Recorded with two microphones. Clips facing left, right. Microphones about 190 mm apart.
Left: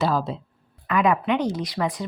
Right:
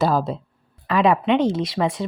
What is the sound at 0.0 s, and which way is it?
Speech, 40° right (ahead or behind).